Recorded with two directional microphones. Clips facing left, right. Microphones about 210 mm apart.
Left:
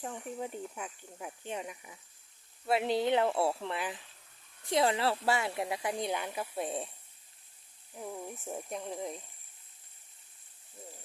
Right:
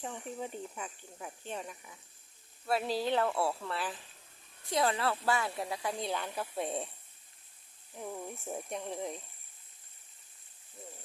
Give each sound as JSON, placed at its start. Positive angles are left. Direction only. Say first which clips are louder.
{"t": 0.0, "sound": "speech", "louder": "left 1 dB", "side_deg": 5}
{"t": 7.9, "sound": "speech", "louder": "even", "side_deg": 5}